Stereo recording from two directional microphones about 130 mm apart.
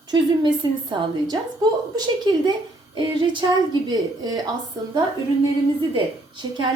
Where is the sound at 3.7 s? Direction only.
35° right (ahead or behind).